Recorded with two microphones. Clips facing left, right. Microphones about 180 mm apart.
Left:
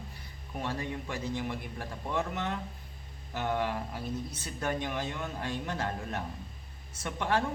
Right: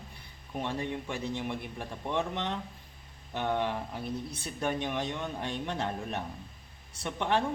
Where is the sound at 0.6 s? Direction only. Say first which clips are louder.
Right 2 dB; 20° right (ahead or behind).